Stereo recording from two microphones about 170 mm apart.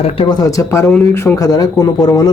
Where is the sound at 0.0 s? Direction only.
35° left (ahead or behind).